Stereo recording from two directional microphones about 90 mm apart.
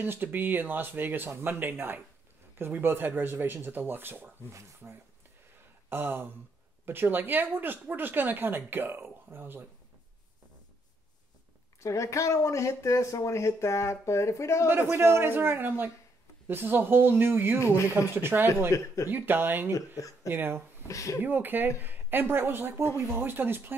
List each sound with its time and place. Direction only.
0.0 s speech: 20° right (ahead or behind)
5.9 s a sound: 25° right (ahead or behind)
6.9 s speech: 20° right (ahead or behind)
11.8 s speech: 35° left (ahead or behind)
14.7 s speech: 20° right (ahead or behind)
17.6 s speech: 35° left (ahead or behind)
18.1 s speech: 25° right (ahead or behind)
18.7 s speech: 35° left (ahead or behind)
19.0 s speech: 20° right (ahead or behind)
20.9 s speech: 35° left (ahead or behind)
21.2 s speech: 20° right (ahead or behind)